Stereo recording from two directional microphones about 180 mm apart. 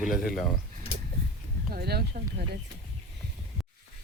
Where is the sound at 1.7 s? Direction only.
60° right (ahead or behind).